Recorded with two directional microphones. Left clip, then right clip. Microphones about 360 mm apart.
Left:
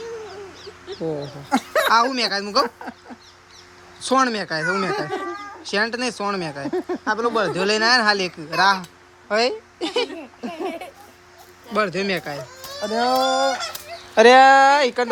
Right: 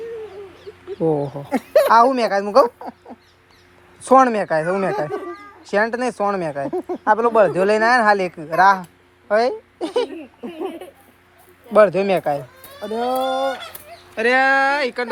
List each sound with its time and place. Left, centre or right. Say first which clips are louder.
0.9 s speech: right 8 dB; right
1.7 s speech: right 6 dB; centre
4.0 s speech: right 6 dB; centre
6.7 s speech: even; centre
7.0 s a woman's voice: right 8 dB; centre
10.4 s a sound: left 1 dB; centre
11.7 s speech: right 8 dB; centre
13.1 s speech: left 2 dB; centre